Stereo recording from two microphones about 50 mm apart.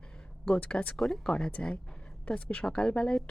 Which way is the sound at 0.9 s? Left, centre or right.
Centre.